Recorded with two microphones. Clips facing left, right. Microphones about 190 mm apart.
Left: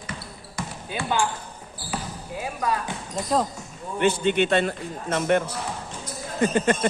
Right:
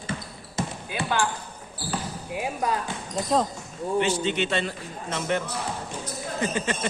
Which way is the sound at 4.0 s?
55° left (ahead or behind).